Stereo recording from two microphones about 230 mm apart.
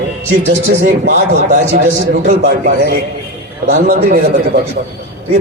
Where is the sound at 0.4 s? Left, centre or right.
Right.